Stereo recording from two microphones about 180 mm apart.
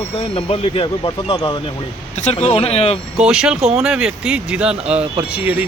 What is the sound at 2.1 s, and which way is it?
Speech, 40° left (ahead or behind).